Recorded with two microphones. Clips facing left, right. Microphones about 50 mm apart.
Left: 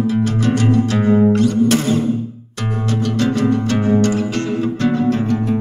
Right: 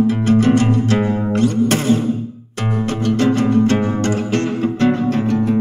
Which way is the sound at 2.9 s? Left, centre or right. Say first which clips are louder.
Right 2 dB; right.